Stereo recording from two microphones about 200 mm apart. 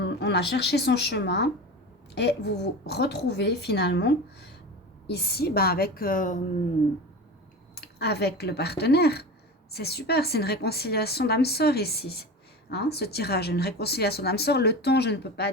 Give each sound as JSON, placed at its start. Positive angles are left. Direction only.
{"t": 0.2, "sound": "a woman's voice", "side_deg": 55}
{"t": 7.8, "sound": "a woman's voice", "side_deg": 55}